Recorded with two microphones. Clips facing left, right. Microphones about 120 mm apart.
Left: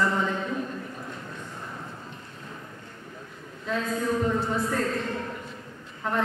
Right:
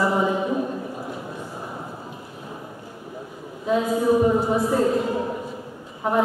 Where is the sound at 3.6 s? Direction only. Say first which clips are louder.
Right 8 dB; 15° right (ahead or behind).